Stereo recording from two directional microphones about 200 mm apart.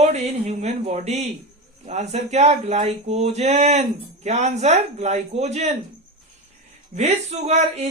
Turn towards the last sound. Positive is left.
turn(degrees=-35)  # may be behind; listen again after turning